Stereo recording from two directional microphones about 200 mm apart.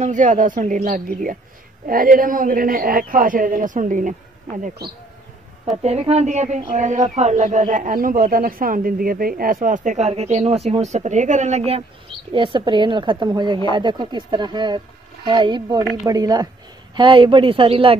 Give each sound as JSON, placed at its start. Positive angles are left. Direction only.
{"t": 0.0, "sound": "a man's voice", "side_deg": -40}
{"t": 5.8, "sound": "a woman's voice", "side_deg": -30}